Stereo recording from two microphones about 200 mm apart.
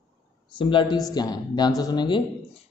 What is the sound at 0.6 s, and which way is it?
A man's voice, 25° left (ahead or behind).